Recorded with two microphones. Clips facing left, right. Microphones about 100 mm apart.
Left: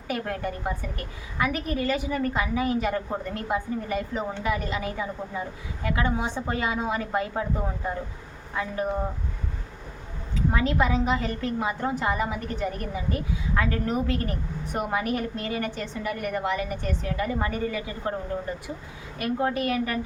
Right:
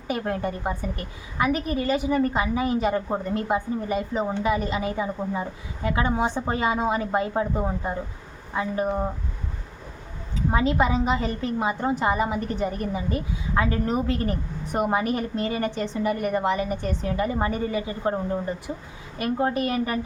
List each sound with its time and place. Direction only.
0.1 s a woman's voice: 25° right (ahead or behind)
10.5 s a woman's voice: 25° right (ahead or behind)